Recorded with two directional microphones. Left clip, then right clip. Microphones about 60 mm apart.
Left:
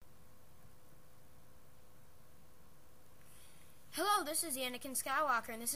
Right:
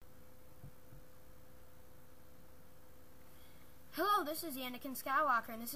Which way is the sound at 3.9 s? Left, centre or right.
Centre.